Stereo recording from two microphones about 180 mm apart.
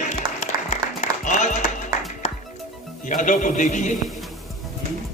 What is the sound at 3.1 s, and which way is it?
Speech, 45° left (ahead or behind).